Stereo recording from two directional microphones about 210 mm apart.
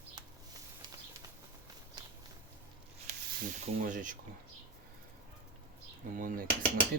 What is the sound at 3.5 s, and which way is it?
Speech, 40° right (ahead or behind).